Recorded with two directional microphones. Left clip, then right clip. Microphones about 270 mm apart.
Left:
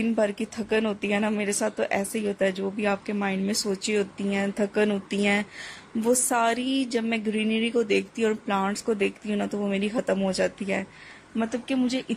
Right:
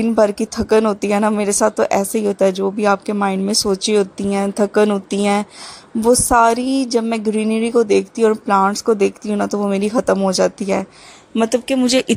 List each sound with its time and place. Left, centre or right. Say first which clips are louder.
0.0 s speech: right 10 dB; right